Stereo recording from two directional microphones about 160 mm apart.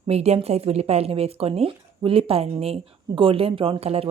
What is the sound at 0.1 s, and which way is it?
A woman's voice, 40° right (ahead or behind).